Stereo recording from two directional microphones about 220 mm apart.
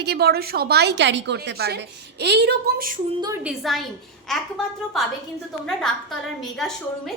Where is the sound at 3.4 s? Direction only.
Centre (ahead or behind).